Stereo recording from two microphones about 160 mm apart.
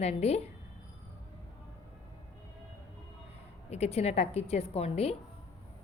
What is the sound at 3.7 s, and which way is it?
A woman's voice, 40° left (ahead or behind).